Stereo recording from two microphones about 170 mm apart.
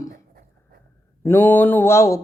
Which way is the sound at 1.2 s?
10° left (ahead or behind).